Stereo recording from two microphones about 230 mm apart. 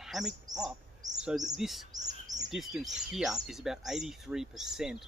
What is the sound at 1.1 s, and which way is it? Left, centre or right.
Speech, centre.